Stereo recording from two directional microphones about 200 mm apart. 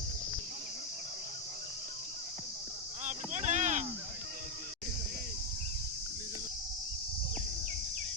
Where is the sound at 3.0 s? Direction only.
35° right (ahead or behind).